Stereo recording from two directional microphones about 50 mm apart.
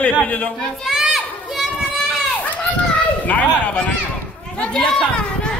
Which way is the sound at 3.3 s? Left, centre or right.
Left.